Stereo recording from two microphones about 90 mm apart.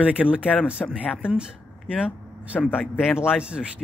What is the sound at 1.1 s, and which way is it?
Speech, 10° right (ahead or behind).